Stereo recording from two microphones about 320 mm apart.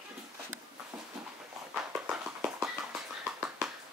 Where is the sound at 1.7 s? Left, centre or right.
Centre.